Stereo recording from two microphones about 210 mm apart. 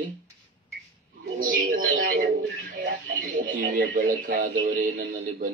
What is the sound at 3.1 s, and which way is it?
Speech, 45° right (ahead or behind).